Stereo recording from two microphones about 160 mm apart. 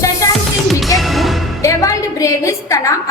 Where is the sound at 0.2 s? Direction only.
20° left (ahead or behind).